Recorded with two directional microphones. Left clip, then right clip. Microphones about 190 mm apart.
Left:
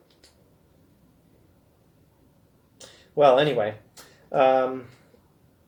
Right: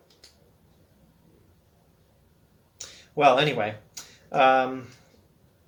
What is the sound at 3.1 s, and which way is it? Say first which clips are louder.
Speech: left 2 dB; 20° right (ahead or behind).